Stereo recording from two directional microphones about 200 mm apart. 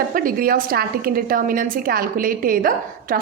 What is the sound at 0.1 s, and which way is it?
A woman's voice, 45° right (ahead or behind).